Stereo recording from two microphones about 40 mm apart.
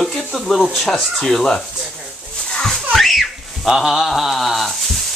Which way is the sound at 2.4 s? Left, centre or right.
Centre.